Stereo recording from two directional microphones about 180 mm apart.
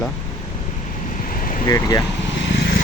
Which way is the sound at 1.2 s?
50° left (ahead or behind).